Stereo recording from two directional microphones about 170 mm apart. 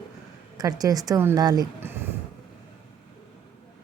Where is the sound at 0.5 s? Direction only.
20° right (ahead or behind).